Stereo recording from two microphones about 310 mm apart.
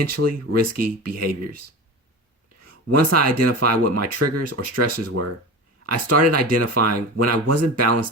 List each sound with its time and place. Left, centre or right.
0.0 s speech: right
2.6 s speech: right